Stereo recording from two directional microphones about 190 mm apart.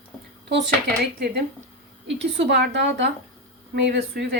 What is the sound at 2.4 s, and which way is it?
Speech, 60° right (ahead or behind).